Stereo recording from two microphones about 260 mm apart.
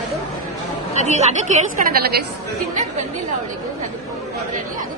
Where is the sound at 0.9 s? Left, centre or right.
Right.